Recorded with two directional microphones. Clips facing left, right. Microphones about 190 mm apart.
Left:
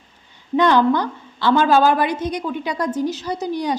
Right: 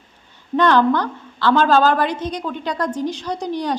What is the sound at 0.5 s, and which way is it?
A woman's voice, 10° left (ahead or behind).